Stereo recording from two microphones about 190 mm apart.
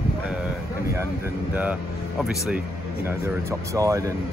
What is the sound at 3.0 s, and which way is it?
Speech, 15° right (ahead or behind).